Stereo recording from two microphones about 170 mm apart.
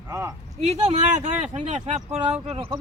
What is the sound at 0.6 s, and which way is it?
Speech, 40° right (ahead or behind).